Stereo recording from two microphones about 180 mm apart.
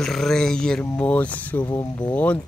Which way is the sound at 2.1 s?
5° left (ahead or behind).